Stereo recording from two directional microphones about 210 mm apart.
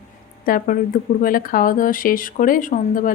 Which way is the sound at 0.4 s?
40° left (ahead or behind).